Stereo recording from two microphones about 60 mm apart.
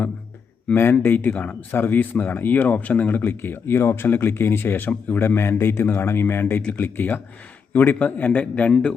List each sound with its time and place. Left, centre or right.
0.7 s a man's voice: left
5.2 s a man's voice: left